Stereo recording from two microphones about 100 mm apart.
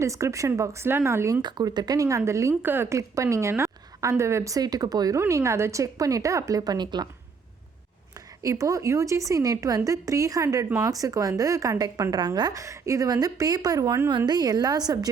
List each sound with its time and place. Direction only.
0.0 s speech: 30° right (ahead or behind)
1.4 s a woman's voice: 45° right (ahead or behind)
8.4 s a woman's voice: 35° right (ahead or behind)